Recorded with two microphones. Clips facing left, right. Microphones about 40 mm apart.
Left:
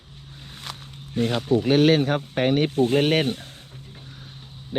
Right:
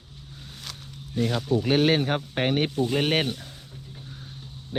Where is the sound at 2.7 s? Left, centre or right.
Left.